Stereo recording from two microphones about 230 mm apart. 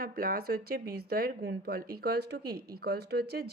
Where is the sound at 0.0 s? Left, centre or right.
Right.